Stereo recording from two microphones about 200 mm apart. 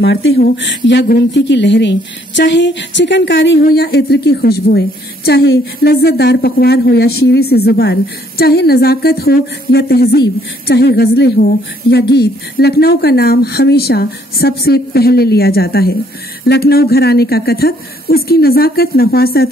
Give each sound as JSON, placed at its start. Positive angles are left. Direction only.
{"t": 0.0, "sound": "a woman's voice", "side_deg": 60}